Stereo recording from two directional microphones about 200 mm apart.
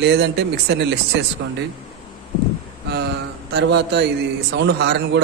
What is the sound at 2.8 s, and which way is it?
Speech, 55° right (ahead or behind).